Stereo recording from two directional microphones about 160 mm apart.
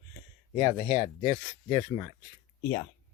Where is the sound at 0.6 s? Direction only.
30° right (ahead or behind).